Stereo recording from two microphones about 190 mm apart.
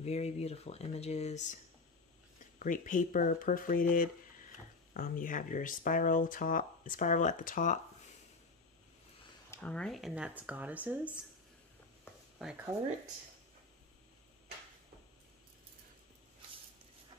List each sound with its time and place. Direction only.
0.0 s speech: 35° left (ahead or behind)
2.6 s speech: 45° left (ahead or behind)
4.9 s speech: 45° left (ahead or behind)
9.5 s speech: 10° left (ahead or behind); by 11.0 s 10° right (ahead or behind)
12.4 s speech: 5° right (ahead or behind)